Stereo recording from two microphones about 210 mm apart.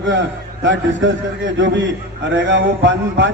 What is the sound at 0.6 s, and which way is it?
Speech, 60° right (ahead or behind).